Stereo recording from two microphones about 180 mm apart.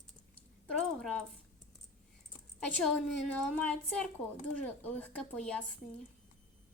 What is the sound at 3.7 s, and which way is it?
Speech, 5° left (ahead or behind).